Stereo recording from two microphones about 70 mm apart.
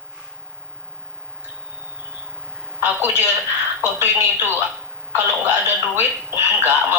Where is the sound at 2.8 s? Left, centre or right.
Right.